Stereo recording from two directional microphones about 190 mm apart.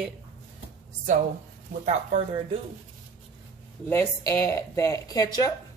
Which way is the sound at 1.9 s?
35° right (ahead or behind).